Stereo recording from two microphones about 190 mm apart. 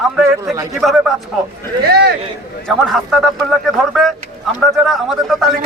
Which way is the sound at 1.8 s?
55° right (ahead or behind).